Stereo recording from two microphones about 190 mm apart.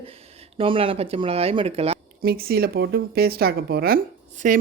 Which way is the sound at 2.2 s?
50° right (ahead or behind).